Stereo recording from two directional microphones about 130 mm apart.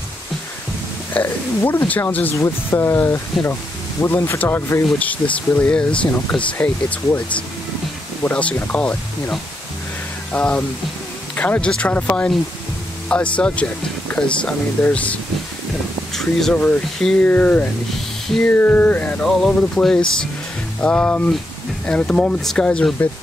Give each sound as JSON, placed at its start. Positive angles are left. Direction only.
{"t": 1.1, "sound": "speech", "side_deg": 15}
{"t": 8.2, "sound": "speech", "side_deg": 10}
{"t": 16.2, "sound": "speech", "side_deg": 5}